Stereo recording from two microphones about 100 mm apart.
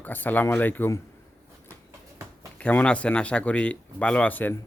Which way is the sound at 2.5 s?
10° left (ahead or behind).